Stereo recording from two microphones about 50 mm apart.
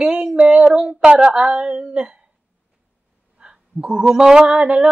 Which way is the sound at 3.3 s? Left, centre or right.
Centre.